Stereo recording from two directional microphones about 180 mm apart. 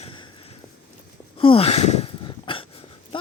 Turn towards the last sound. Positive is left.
turn(degrees=30)  # may be behind; listen again after turning